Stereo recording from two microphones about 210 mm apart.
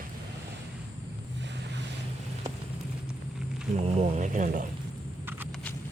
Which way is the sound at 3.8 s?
30° right (ahead or behind).